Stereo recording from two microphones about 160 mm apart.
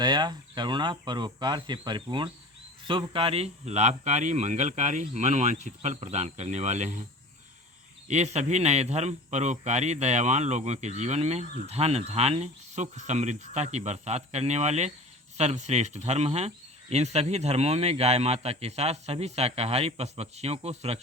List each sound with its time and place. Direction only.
0.0 s speech: 25° right (ahead or behind); by 7.0 s 45° right (ahead or behind)
8.0 s speech: 45° right (ahead or behind)